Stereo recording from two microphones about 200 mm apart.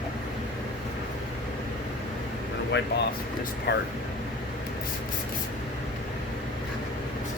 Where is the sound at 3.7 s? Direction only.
55° left (ahead or behind).